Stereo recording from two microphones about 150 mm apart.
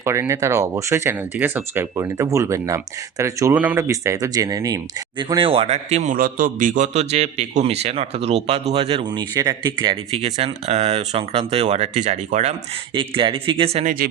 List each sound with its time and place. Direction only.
0.0 s speech: 20° right (ahead or behind)
5.3 s a man's voice: 35° right (ahead or behind)
6.1 s a man's voice: 70° right (ahead or behind); by 12.5 s 50° right (ahead or behind)
12.9 s a man's voice: 35° right (ahead or behind)